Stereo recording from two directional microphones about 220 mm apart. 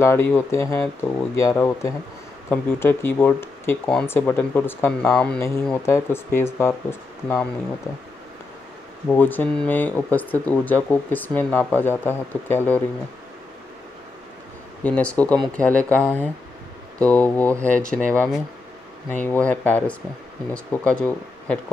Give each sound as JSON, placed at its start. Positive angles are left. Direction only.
{"t": 0.0, "sound": "speech", "side_deg": 10}
{"t": 9.1, "sound": "speech", "side_deg": 10}
{"t": 14.8, "sound": "speech", "side_deg": 5}